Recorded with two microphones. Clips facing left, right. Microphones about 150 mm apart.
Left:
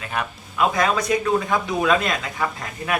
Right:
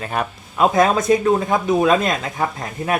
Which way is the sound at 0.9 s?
25° right (ahead or behind).